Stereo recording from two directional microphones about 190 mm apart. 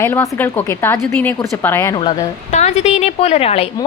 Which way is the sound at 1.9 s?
25° left (ahead or behind).